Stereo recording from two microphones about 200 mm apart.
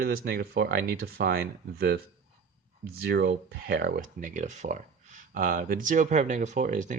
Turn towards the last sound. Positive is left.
turn(degrees=-40)  # may be behind; listen again after turning